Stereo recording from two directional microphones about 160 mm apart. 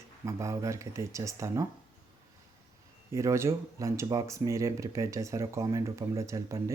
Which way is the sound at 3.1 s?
15° right (ahead or behind).